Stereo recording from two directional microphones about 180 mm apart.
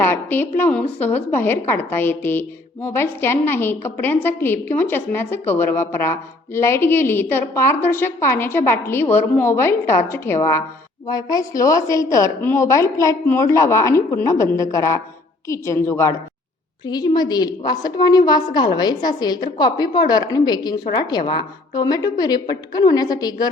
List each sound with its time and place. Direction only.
0.0 s a woman's voice: 10° left (ahead or behind)